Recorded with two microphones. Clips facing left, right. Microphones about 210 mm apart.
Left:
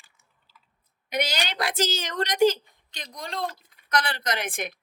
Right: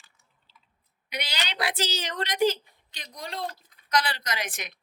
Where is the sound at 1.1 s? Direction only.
45° left (ahead or behind).